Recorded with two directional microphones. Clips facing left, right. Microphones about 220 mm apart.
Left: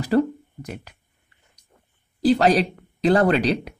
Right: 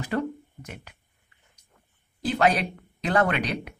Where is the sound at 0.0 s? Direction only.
35° left (ahead or behind).